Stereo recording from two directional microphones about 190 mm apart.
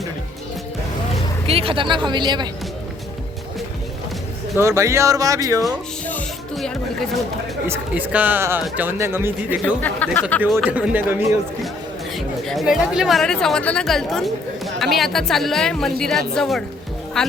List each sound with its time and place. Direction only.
1.5 s speech: 30° right (ahead or behind)
4.5 s speech: 15° right (ahead or behind)
6.1 s music: 10° left (ahead or behind)
7.7 s speech: 10° right (ahead or behind)
10.2 s speech: 10° left (ahead or behind)
10.7 s speech: 5° right (ahead or behind)
12.1 s speech: centre (ahead or behind)